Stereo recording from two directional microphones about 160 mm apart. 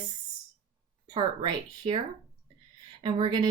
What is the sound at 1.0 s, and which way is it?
Speech, 25° right (ahead or behind).